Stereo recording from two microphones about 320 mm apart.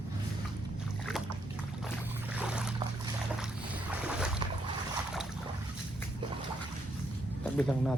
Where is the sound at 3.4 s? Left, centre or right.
Centre.